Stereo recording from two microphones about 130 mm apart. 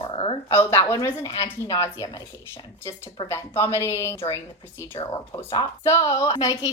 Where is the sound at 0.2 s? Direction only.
40° left (ahead or behind).